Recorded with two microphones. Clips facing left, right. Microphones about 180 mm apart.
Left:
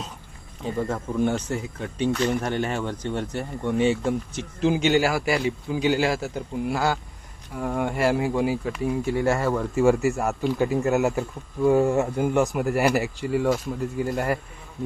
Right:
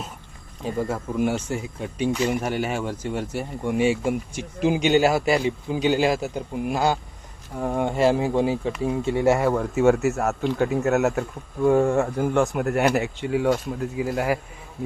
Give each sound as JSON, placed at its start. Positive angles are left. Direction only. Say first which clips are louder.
{"t": 0.6, "sound": "speech", "louder": "right 1 dB", "side_deg": -10}